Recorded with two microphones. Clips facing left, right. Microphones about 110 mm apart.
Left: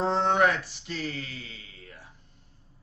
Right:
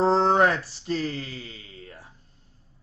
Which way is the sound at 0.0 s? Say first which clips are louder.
Right 4 dB; 35° right (ahead or behind).